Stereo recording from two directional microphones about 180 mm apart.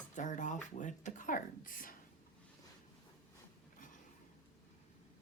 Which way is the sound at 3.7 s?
45° left (ahead or behind).